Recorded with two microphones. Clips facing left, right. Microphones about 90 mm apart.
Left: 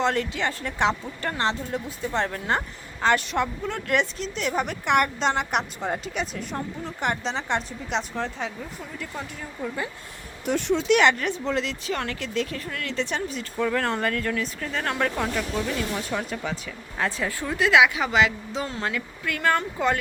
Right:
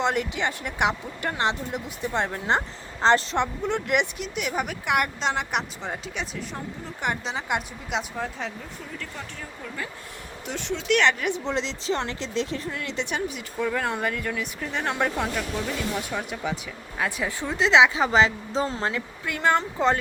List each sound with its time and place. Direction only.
0.0 s speech: 15° right (ahead or behind)
10.4 s speech: 50° left (ahead or behind)
11.2 s speech: 15° right (ahead or behind)